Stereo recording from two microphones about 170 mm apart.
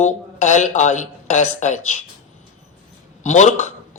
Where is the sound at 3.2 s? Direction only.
45° left (ahead or behind).